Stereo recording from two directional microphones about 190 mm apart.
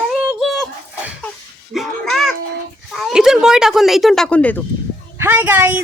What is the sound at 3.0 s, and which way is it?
Speech, 5° right (ahead or behind).